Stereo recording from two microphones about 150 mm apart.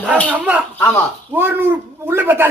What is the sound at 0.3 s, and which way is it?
A man's voice, 10° right (ahead or behind).